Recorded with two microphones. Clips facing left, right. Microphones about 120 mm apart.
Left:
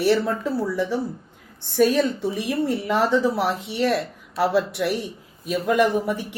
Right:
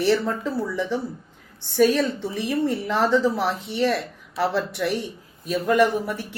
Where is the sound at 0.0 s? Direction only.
10° left (ahead or behind).